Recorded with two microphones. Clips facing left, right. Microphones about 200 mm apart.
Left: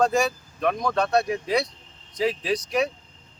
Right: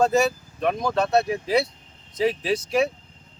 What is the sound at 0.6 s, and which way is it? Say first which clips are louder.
Speech: right 1 dB; 5° right (ahead or behind).